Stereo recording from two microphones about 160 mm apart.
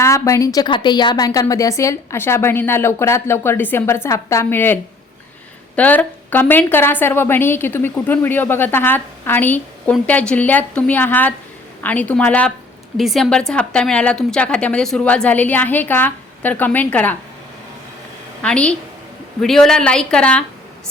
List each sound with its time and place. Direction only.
0.0 s a woman's voice: 20° left (ahead or behind)
18.4 s a woman's voice: 5° left (ahead or behind)